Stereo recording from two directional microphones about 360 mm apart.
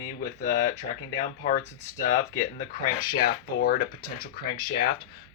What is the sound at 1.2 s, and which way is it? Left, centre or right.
Speech, left.